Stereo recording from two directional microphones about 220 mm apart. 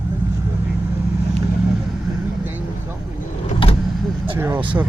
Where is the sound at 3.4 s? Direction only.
25° left (ahead or behind).